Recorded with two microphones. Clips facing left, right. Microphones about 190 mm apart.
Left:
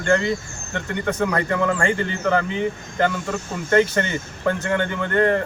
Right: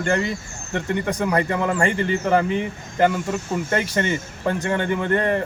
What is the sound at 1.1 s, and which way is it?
Speech, 20° right (ahead or behind).